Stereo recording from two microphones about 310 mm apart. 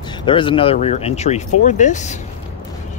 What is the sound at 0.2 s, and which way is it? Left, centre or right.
Speech, centre.